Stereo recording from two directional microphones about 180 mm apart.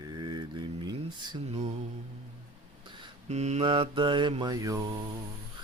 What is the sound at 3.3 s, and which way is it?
Mantra, 40° right (ahead or behind).